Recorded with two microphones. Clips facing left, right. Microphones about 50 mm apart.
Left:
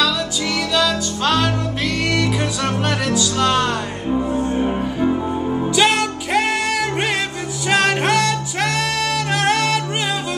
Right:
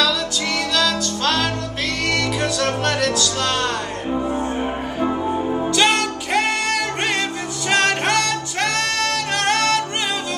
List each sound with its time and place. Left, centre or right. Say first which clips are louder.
0.7 s music: left 3 dB; centre
4.1 s music: left 3 dB; centre
4.4 s music: left 3 dB; centre
5.8 s music: left 2 dB; centre